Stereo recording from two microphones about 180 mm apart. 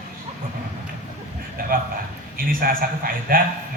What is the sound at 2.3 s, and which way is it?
A man's voice, 55° right (ahead or behind).